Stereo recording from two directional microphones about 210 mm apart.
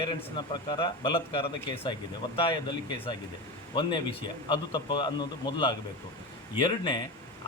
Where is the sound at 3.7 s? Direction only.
25° left (ahead or behind).